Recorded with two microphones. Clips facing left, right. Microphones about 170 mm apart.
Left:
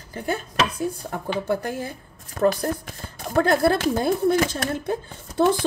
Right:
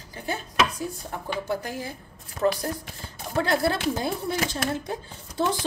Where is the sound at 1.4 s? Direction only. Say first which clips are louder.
Left 4 dB; 55° left (ahead or behind).